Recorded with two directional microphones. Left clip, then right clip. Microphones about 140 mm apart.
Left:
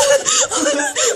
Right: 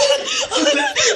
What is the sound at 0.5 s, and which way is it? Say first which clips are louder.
Speech: right 2 dB; 45° left (ahead or behind).